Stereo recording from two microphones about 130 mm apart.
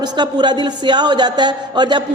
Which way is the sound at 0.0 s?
35° right (ahead or behind).